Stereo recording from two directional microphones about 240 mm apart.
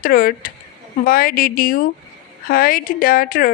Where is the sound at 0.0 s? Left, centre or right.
Left.